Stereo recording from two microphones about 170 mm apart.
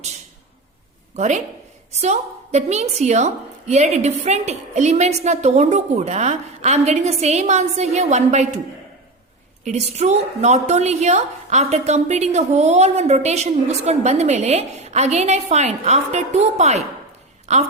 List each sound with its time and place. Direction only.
1.1 s a woman's voice: 45° right (ahead or behind)
9.6 s a woman's voice: 40° right (ahead or behind)